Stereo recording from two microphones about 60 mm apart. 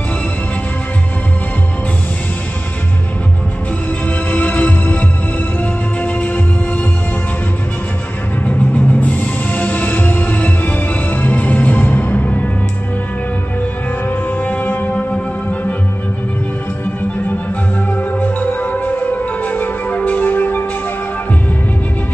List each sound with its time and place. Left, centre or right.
4.3 s music: left
8.5 s music: left
14.0 s music: left
17.9 s music: left